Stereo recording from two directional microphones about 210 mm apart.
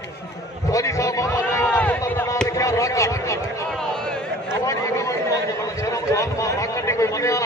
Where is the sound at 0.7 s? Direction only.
15° left (ahead or behind).